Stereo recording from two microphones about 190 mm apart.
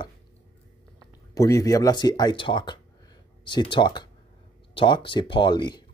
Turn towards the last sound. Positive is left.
turn(degrees=25)  # may be behind; listen again after turning